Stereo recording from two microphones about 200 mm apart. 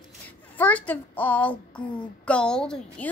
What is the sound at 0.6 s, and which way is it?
A woman's voice, 10° left (ahead or behind).